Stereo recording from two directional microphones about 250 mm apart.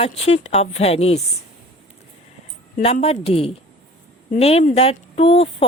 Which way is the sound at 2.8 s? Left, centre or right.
Left.